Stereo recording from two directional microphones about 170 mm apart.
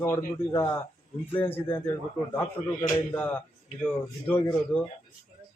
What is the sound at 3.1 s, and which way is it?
Speech, 10° left (ahead or behind).